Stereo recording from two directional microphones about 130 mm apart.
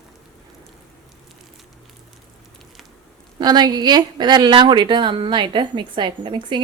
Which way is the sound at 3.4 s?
30° right (ahead or behind).